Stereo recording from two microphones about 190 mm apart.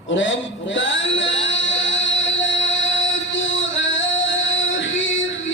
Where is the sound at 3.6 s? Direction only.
80° left.